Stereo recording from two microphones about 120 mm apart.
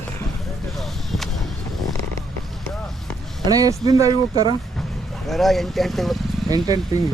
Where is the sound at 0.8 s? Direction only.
Centre (ahead or behind).